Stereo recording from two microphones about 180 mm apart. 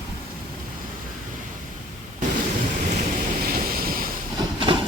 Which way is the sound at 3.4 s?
55° right (ahead or behind).